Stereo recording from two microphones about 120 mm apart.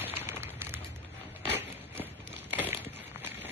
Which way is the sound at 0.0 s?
15° right (ahead or behind).